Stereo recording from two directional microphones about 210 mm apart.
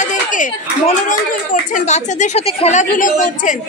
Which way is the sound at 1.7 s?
35° left (ahead or behind).